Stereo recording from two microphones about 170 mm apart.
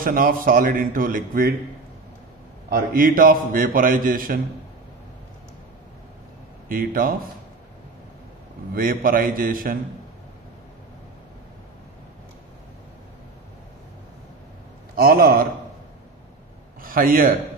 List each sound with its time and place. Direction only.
0.0 s a man's voice: 55° right (ahead or behind)
2.9 s a man's voice: 55° right (ahead or behind)
6.7 s a man's voice: 55° right (ahead or behind)
8.7 s a man's voice: 55° right (ahead or behind)
15.0 s a man's voice: 60° right (ahead or behind)
16.8 s a man's voice: 55° right (ahead or behind)